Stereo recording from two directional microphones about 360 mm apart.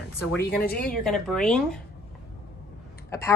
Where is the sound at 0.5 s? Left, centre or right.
Left.